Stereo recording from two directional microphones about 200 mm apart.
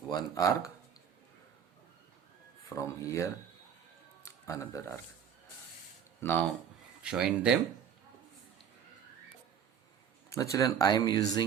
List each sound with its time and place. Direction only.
0.1 s speech: 20° left (ahead or behind)
2.6 s speech: 15° left (ahead or behind)
4.2 s music: 15° left (ahead or behind)
7.0 s speech: 5° right (ahead or behind)
10.2 s speech: 15° left (ahead or behind)